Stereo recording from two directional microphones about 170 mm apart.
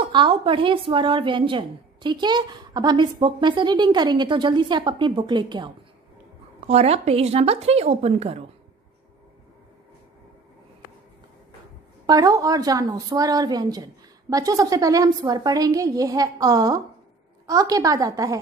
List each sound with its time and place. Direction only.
0.0 s speech: 30° right (ahead or behind)
6.7 s a woman's voice: 40° right (ahead or behind)
12.1 s speech: 20° right (ahead or behind)